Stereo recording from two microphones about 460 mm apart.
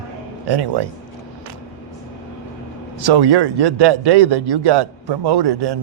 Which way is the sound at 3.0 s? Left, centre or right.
Right.